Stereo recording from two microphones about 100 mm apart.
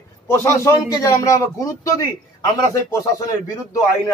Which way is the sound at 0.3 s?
25° left (ahead or behind).